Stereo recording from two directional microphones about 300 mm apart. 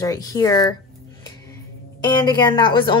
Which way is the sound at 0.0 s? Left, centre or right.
Centre.